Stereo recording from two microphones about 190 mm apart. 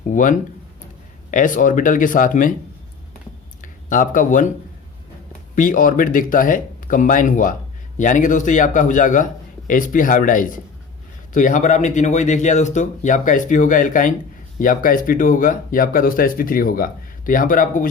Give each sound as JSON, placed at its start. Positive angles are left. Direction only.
{"t": 0.1, "sound": "speech", "side_deg": 45}
{"t": 3.6, "sound": "speech", "side_deg": 45}
{"t": 5.5, "sound": "speech", "side_deg": 45}